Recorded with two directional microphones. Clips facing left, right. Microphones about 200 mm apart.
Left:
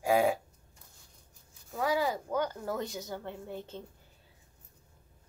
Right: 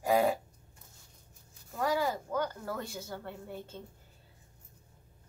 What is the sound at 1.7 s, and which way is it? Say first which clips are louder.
Speech: left 1 dB; 10° left (ahead or behind).